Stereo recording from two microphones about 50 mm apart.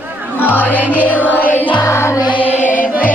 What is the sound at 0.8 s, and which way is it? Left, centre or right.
Music, right.